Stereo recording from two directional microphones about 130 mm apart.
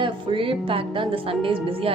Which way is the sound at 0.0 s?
40° right (ahead or behind).